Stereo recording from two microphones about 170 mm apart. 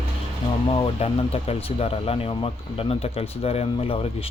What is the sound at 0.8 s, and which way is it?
Speech, 35° left (ahead or behind).